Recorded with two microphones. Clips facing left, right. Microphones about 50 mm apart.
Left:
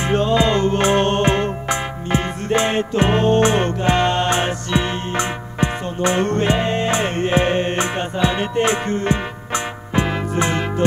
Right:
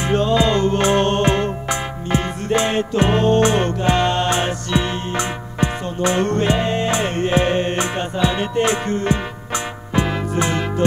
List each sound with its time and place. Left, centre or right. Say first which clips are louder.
0.0 s music: even; left